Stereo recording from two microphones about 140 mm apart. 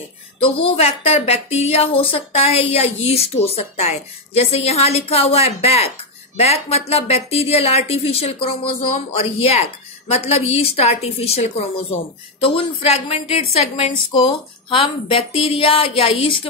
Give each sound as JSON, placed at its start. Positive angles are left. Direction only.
{"t": 0.4, "sound": "a woman's voice", "side_deg": 40}